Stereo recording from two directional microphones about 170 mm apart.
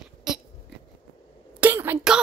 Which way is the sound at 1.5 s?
10° right (ahead or behind).